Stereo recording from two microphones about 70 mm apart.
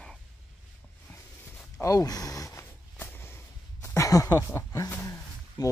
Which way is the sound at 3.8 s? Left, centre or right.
Left.